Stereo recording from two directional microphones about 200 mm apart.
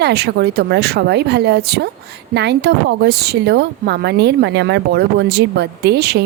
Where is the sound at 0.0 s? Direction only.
55° right (ahead or behind).